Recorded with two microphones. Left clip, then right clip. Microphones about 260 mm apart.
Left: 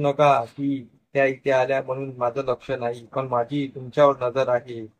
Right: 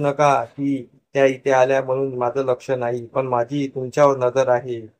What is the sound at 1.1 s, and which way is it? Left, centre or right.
Speech, centre.